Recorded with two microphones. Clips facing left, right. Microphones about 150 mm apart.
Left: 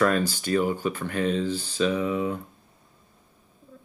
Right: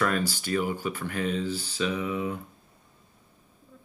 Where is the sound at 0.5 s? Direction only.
30° left (ahead or behind).